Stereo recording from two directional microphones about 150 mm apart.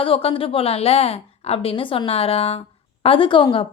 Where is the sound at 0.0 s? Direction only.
40° left (ahead or behind).